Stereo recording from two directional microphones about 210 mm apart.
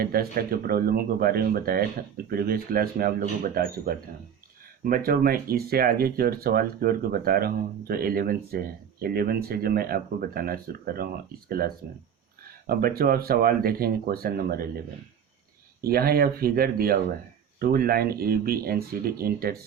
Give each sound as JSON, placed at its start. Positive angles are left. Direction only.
{"t": 0.0, "sound": "speech", "side_deg": -45}
{"t": 15.8, "sound": "speech", "side_deg": -45}